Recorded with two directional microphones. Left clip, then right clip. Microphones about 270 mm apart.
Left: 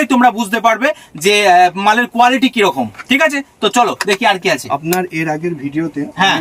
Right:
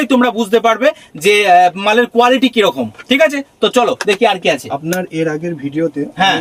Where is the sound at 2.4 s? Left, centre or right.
Centre.